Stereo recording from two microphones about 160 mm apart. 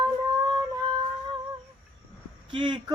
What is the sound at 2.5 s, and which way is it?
Speech, 30° right (ahead or behind).